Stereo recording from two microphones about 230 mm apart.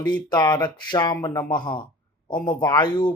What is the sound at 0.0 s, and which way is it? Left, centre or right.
Speech, centre.